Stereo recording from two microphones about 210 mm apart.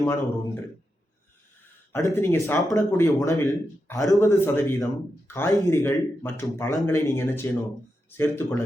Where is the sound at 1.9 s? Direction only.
15° left (ahead or behind).